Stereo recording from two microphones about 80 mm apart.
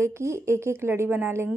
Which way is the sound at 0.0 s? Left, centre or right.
Right.